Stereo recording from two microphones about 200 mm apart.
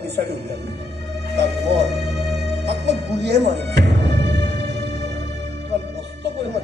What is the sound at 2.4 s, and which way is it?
Music, 55° right (ahead or behind).